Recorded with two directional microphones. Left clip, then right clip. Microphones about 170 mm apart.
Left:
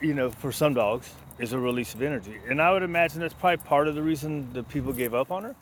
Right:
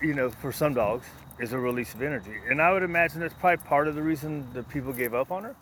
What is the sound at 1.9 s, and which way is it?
Speech, 40° left (ahead or behind).